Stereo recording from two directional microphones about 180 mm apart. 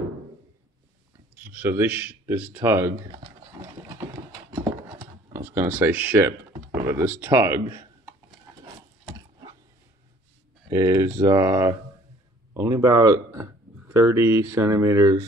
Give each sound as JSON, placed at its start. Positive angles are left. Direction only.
{"t": 1.4, "sound": "speech", "side_deg": -10}
{"t": 4.5, "sound": "clip-clop", "side_deg": -20}
{"t": 5.3, "sound": "speech", "side_deg": -15}
{"t": 10.7, "sound": "speech", "side_deg": -20}